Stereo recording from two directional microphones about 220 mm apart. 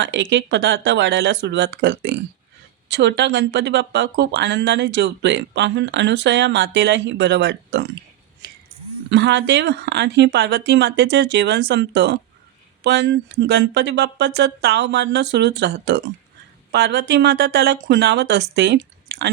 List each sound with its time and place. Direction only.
0.0 s speech: 55° right (ahead or behind)
8.4 s a sound: 55° right (ahead or behind)
9.0 s speech: 55° right (ahead or behind)